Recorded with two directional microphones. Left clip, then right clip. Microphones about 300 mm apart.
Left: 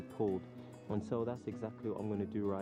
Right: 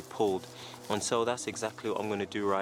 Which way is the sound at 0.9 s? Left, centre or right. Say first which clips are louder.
Right 9 dB; centre.